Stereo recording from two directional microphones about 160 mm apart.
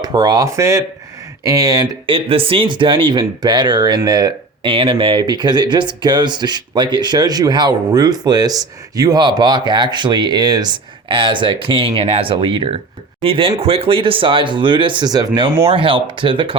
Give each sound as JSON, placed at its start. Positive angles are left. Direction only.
{"t": 0.0, "sound": "speech", "side_deg": -25}
{"t": 15.6, "sound": "speech", "side_deg": -35}